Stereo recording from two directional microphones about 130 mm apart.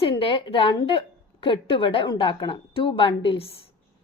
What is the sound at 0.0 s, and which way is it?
A woman's voice, 45° left (ahead or behind).